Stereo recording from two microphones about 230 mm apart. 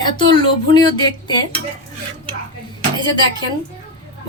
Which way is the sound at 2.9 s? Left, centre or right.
Centre.